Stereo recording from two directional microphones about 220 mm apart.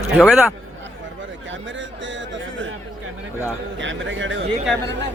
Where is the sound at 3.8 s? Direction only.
55° right (ahead or behind).